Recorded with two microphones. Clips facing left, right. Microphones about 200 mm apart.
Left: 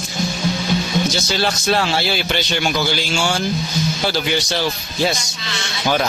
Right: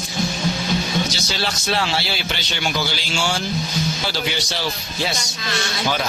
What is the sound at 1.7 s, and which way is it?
Speech, 45° left (ahead or behind).